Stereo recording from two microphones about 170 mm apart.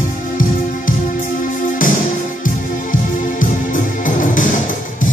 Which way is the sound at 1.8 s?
50° left (ahead or behind).